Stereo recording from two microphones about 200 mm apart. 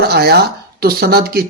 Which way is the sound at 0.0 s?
50° right (ahead or behind).